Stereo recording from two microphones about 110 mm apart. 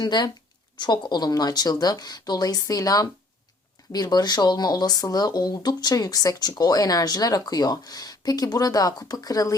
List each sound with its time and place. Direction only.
0.0 s speech: 40° left (ahead or behind)